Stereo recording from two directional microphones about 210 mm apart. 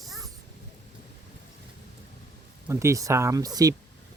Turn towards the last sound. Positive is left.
turn(degrees=-15)  # may be behind; listen again after turning